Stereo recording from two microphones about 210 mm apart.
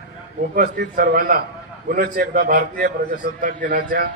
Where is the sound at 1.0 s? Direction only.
40° right (ahead or behind).